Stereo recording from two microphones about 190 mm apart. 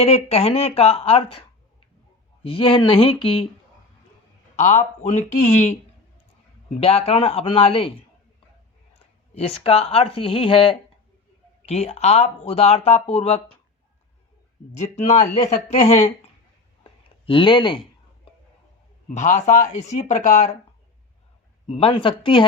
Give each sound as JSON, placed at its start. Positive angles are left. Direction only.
{"t": 0.0, "sound": "speech", "side_deg": 35}
{"t": 4.5, "sound": "speech", "side_deg": 35}
{"t": 6.7, "sound": "speech", "side_deg": 30}
{"t": 9.3, "sound": "speech", "side_deg": 30}
{"t": 14.7, "sound": "speech", "side_deg": 35}
{"t": 17.2, "sound": "speech", "side_deg": 25}
{"t": 19.1, "sound": "speech", "side_deg": 40}
{"t": 21.7, "sound": "speech", "side_deg": 30}